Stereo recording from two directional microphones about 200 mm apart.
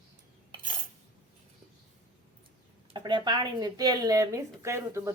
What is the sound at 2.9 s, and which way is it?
A woman's voice, 20° right (ahead or behind).